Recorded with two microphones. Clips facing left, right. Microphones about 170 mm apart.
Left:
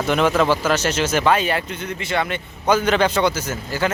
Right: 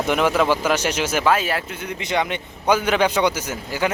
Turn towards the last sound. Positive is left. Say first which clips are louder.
# left 1 dB
turn(degrees=-15)  # may be behind; listen again after turning